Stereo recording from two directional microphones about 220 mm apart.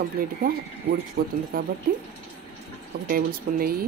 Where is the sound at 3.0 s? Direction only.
40° right (ahead or behind).